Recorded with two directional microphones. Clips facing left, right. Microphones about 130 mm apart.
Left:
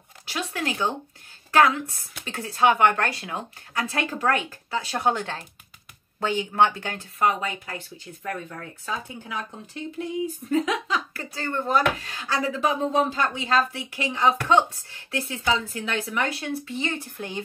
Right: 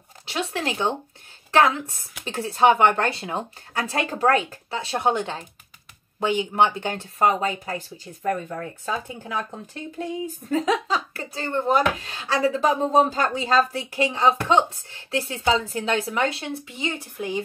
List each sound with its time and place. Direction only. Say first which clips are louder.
0.3 s speech: right 2 dB; 25° right (ahead or behind); by 9.4 s 45° right (ahead or behind)
10.5 s speech: right 2 dB; 35° right (ahead or behind); by 17.4 s 10° right (ahead or behind)